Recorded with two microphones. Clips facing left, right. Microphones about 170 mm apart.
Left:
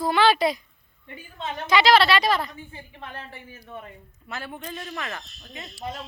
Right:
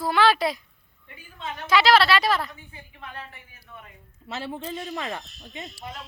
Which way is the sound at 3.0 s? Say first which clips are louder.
Left 1 dB; 30° left (ahead or behind).